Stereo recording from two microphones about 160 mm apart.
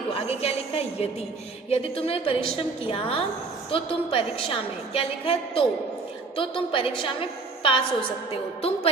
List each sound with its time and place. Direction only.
0.1 s music: 40° left (ahead or behind)
1.7 s a woman's voice: 35° left (ahead or behind)